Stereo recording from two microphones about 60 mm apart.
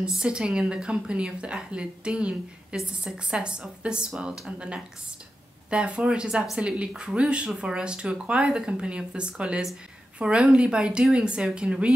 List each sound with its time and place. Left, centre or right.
0.0 s a woman's voice: centre